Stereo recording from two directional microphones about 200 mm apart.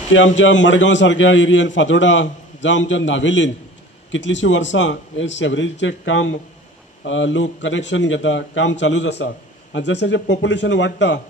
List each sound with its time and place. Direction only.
0.4 s a man's voice: 65° left (ahead or behind)